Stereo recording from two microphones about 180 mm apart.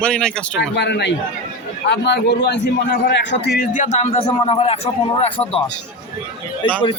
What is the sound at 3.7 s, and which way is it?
A man's voice, 40° left (ahead or behind).